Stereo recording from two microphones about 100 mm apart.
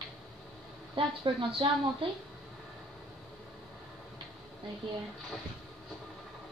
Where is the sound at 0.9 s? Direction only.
60° right (ahead or behind).